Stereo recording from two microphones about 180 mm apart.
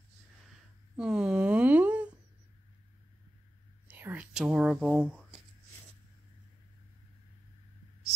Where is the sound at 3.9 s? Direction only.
10° right (ahead or behind).